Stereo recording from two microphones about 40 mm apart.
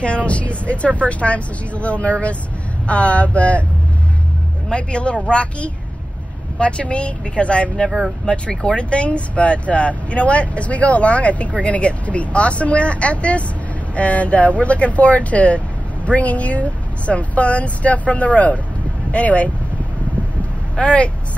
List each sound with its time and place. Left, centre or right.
0.0 s speech: left
4.6 s speech: left
20.7 s speech: left